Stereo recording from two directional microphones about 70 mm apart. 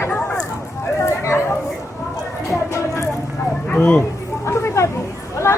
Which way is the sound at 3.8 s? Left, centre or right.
Centre.